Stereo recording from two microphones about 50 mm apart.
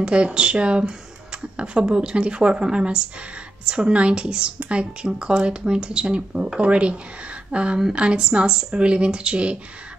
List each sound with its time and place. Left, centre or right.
0.0 s a woman's voice: right